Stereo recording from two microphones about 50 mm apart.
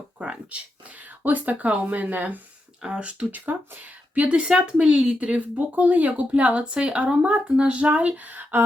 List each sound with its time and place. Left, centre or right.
0.2 s a sound: right
1.2 s speech: right
2.8 s speech: right